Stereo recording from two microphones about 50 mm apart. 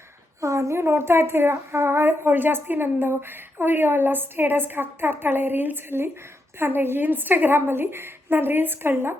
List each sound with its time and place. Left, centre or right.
0.4 s a woman's voice: right